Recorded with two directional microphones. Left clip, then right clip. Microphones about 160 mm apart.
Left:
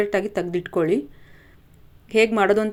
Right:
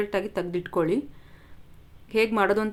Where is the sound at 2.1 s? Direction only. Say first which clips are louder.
Left 5 dB; 15° left (ahead or behind).